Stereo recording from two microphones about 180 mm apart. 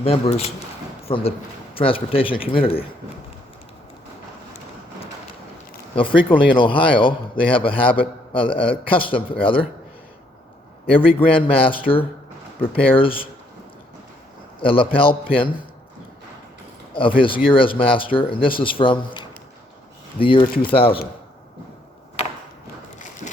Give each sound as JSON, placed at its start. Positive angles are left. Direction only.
{"t": 0.0, "sound": "a man's voice", "side_deg": 35}
{"t": 5.9, "sound": "a man's voice", "side_deg": 30}
{"t": 10.8, "sound": "a man's voice", "side_deg": 30}
{"t": 14.6, "sound": "a man's voice", "side_deg": 30}
{"t": 16.9, "sound": "a man's voice", "side_deg": 30}